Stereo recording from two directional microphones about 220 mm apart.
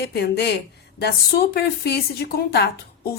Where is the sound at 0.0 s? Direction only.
45° left (ahead or behind).